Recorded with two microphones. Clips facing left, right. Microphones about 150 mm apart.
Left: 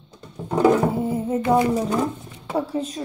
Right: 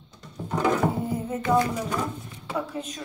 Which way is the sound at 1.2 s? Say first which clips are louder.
Left 4 dB; 30° left (ahead or behind).